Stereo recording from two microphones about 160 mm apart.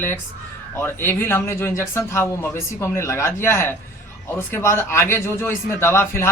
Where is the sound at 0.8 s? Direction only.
15° left (ahead or behind).